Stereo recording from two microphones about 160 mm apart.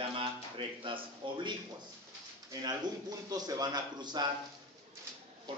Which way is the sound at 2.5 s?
25° right (ahead or behind).